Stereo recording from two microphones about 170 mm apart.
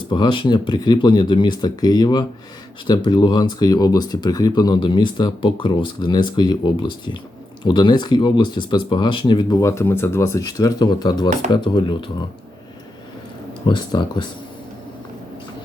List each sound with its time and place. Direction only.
0.1 s speech: 30° left (ahead or behind)
13.7 s speech: 25° left (ahead or behind)